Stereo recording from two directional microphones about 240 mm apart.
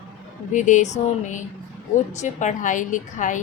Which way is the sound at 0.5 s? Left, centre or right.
Left.